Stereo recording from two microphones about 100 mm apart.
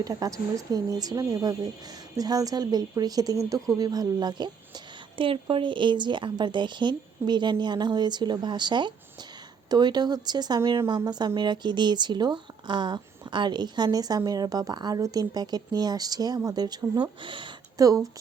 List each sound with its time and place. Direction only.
0.0 s a woman's voice: 35° right (ahead or behind); by 17.5 s 55° right (ahead or behind)
17.7 s speech: 35° right (ahead or behind)